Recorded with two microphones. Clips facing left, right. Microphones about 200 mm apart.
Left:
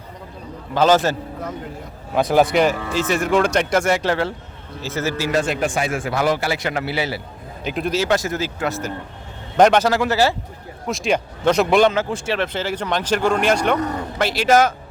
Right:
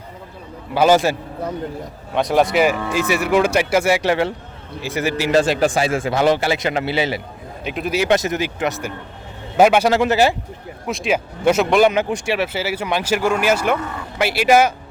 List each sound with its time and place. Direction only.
0.7 s speech: 10° right (ahead or behind)
2.1 s speech: centre (ahead or behind); by 5.3 s 15° right (ahead or behind)
5.3 s a man's voice: 30° right (ahead or behind)
7.6 s a man's voice: centre (ahead or behind)
7.9 s speech: 20° right (ahead or behind)
9.6 s speech: 10° right (ahead or behind)
9.9 s a man's voice: 20° right (ahead or behind)
10.8 s a man's voice: 5° right (ahead or behind)
11.9 s speech: 15° right (ahead or behind)